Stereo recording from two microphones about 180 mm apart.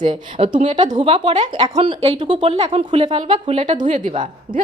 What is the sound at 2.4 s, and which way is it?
A woman's voice, 35° right (ahead or behind).